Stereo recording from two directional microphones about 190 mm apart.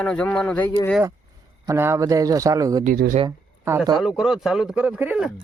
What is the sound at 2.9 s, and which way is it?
Speech, 45° right (ahead or behind).